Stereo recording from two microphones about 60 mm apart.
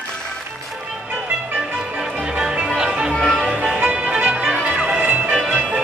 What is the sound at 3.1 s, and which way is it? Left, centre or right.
Music, centre.